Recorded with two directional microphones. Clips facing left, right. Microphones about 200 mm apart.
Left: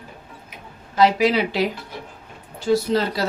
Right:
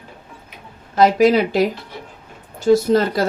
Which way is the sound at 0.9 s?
45° right (ahead or behind).